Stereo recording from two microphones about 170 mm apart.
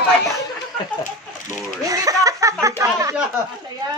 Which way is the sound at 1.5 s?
20° right (ahead or behind).